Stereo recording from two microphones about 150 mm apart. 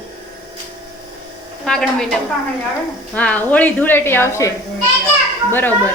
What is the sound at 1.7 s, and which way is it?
Speech, 5° left (ahead or behind).